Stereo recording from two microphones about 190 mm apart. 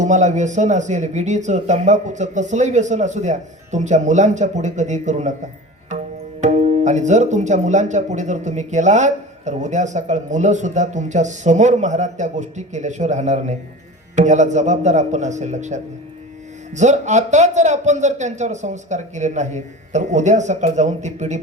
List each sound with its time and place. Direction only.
0.0 s speech: 40° right (ahead or behind)
6.4 s speech: 35° right (ahead or behind)